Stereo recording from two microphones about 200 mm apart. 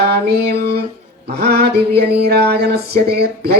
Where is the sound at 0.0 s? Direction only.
55° right (ahead or behind).